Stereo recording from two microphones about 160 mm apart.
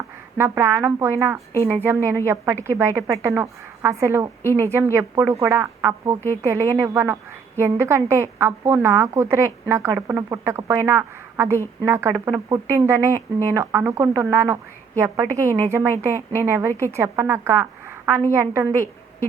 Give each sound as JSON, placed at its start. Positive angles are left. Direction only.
{"t": 0.3, "sound": "speech", "side_deg": -15}